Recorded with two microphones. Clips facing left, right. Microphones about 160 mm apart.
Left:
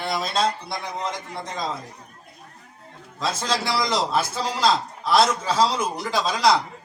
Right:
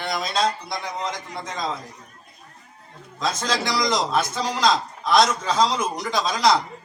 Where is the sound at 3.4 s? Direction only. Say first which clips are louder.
Even; 5° left (ahead or behind).